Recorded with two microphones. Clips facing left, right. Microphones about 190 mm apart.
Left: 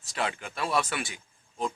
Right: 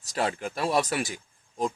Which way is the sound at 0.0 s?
40° right (ahead or behind).